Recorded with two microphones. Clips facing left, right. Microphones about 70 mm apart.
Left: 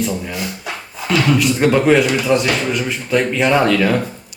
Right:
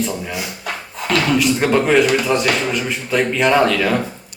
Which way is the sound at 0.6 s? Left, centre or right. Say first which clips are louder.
Right 1 dB; right.